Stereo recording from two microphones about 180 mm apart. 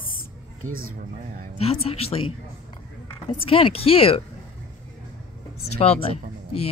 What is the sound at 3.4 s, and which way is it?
Speech, 30° left (ahead or behind).